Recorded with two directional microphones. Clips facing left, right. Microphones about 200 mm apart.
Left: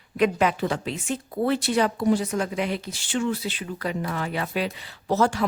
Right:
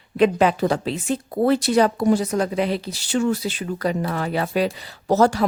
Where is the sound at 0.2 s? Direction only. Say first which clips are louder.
Right 5 dB; 30° right (ahead or behind).